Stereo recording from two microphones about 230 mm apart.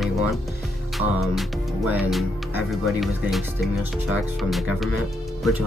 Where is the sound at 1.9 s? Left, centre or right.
Centre.